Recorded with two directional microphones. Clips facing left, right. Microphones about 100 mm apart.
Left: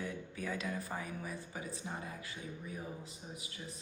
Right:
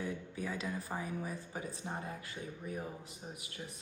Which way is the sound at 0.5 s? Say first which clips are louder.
Left 1 dB; 30° right (ahead or behind).